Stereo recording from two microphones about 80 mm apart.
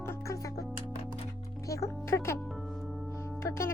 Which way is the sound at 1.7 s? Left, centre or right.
Left.